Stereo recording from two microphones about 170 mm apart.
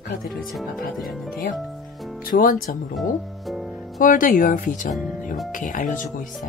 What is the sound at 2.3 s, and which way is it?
Speech, 55° left (ahead or behind).